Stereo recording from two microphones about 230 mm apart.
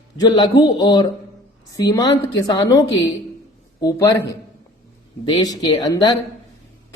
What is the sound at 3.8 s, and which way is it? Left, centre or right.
A woman's voice, centre.